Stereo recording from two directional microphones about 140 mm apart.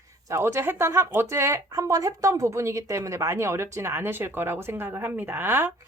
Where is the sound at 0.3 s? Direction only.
20° right (ahead or behind).